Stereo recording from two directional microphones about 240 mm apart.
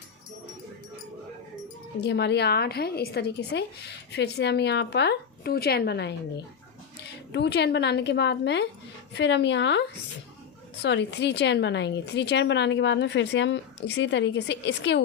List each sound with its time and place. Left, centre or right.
2.0 s a woman's voice: left
10.8 s a woman's voice: left